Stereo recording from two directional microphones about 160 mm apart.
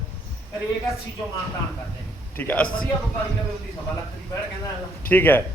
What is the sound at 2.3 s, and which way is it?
Speech, 10° left (ahead or behind).